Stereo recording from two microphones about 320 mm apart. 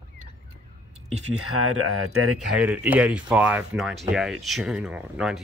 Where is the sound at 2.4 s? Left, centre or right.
Centre.